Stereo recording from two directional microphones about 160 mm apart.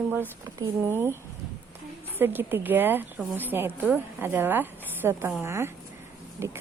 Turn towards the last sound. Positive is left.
turn(degrees=-15)  # may be behind; listen again after turning